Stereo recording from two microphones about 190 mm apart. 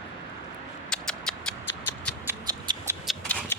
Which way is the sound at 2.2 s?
15° right (ahead or behind).